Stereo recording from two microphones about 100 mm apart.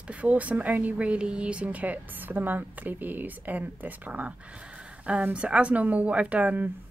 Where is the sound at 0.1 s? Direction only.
15° right (ahead or behind).